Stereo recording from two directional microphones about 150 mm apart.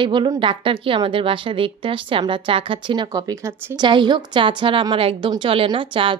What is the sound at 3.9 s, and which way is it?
A woman's voice, 30° right (ahead or behind).